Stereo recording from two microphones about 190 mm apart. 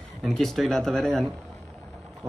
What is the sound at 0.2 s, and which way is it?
A man's voice, centre (ahead or behind).